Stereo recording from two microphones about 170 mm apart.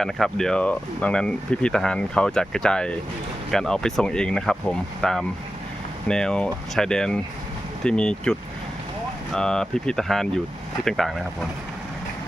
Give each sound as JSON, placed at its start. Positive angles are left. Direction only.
{"t": 0.0, "sound": "speech", "side_deg": 0}